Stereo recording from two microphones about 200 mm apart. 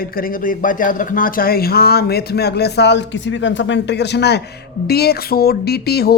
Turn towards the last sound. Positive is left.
turn(degrees=50)  # may be behind; listen again after turning